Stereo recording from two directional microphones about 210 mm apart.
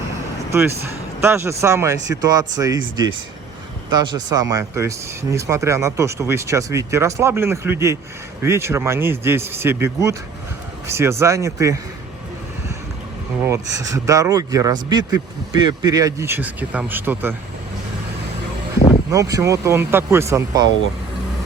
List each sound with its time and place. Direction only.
1.2 s speech: 10° right (ahead or behind)
13.4 s speech: 15° right (ahead or behind)
19.1 s speech: 15° right (ahead or behind)